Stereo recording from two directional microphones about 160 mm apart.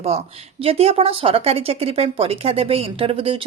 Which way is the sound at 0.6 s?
40° right (ahead or behind).